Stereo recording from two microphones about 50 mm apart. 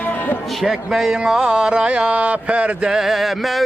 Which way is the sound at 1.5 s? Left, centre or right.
Right.